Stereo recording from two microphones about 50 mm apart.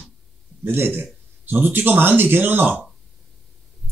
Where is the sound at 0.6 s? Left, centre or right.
Right.